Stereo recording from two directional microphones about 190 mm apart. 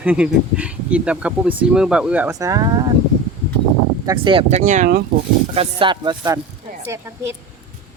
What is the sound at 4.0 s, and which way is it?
Speech, 20° right (ahead or behind).